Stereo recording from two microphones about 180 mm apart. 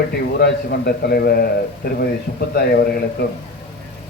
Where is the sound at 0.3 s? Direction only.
65° left (ahead or behind).